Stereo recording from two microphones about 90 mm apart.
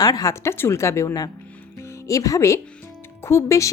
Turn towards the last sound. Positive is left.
turn(degrees=35)  # may be behind; listen again after turning